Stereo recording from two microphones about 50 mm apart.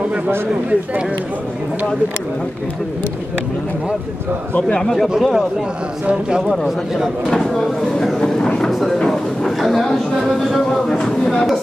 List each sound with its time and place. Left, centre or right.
5.2 s a man's voice: centre
6.0 s speech: centre
6.5 s a man's voice: centre
8.2 s vehicle: centre
8.6 s a sound: centre
8.9 s a man's voice: centre
10.9 s speech: centre